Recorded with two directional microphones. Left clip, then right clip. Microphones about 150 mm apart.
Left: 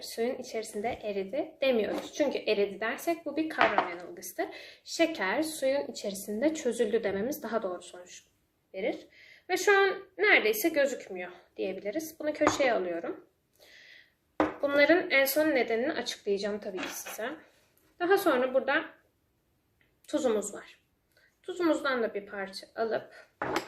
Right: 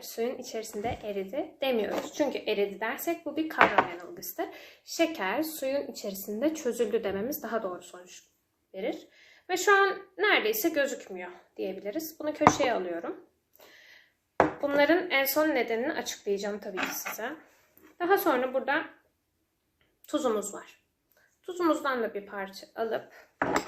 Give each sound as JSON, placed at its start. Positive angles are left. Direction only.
{"t": 0.0, "sound": "a woman's voice", "side_deg": 20}
{"t": 13.7, "sound": "a sound", "side_deg": 20}
{"t": 14.6, "sound": "a woman's voice", "side_deg": 20}
{"t": 17.9, "sound": "a woman's voice", "side_deg": 20}
{"t": 20.1, "sound": "a woman's voice", "side_deg": 20}
{"t": 21.4, "sound": "a woman's voice", "side_deg": 20}